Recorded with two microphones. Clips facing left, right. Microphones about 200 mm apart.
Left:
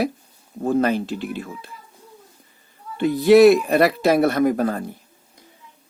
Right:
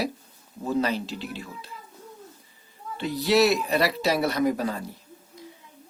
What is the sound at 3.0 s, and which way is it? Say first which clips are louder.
Speech: left 9 dB; 50° left (ahead or behind).